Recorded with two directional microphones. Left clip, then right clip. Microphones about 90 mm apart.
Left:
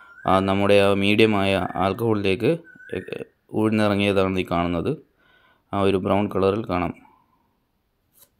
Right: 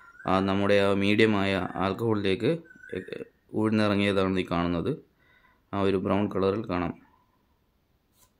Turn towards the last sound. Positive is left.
turn(degrees=30)  # may be behind; listen again after turning